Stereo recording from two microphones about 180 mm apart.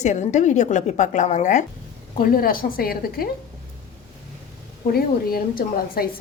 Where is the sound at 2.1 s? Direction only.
55° left (ahead or behind).